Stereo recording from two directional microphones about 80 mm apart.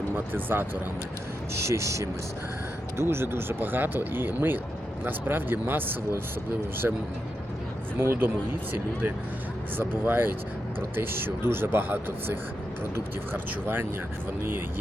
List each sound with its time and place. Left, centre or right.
0.3 s speech: right
1.5 s speech: right
9.7 s speech: right